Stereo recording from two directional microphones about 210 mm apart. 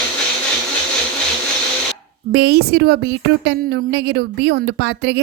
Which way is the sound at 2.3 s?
50° right (ahead or behind).